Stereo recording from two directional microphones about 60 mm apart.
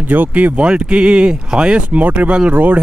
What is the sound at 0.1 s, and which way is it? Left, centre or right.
A man's voice, right.